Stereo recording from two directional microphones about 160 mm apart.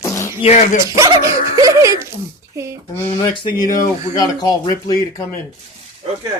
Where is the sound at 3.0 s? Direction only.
35° left (ahead or behind).